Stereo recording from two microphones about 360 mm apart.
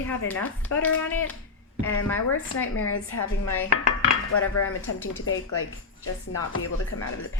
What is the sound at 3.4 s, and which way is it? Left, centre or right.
Dishes, left.